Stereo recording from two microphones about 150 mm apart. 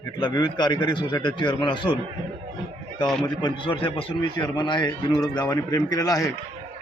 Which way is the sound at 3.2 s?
30° left (ahead or behind).